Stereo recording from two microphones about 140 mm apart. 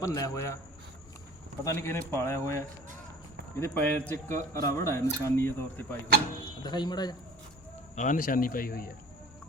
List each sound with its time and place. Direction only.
0.0 s speech: 25° left (ahead or behind)
1.6 s a man's voice: 20° left (ahead or behind)
6.4 s speech: 30° left (ahead or behind)
7.9 s speech: 70° left (ahead or behind); by 8.9 s 90° left